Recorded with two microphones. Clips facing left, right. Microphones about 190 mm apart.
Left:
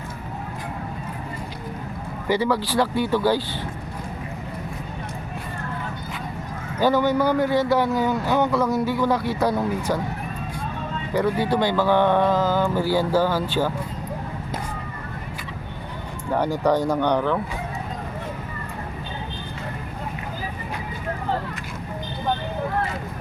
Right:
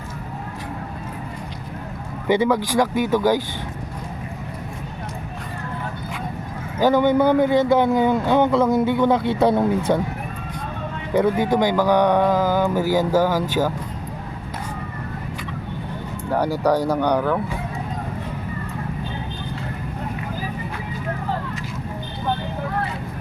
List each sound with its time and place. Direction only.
2.2 s speech: 20° right (ahead or behind)
6.7 s speech: 15° right (ahead or behind)
11.1 s speech: 20° right (ahead or behind)
16.9 s speech: 10° right (ahead or behind)